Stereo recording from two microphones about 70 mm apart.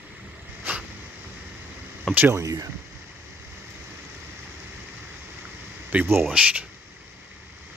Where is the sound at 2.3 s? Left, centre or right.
Right.